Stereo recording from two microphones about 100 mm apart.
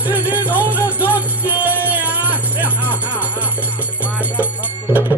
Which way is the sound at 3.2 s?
15° right (ahead or behind).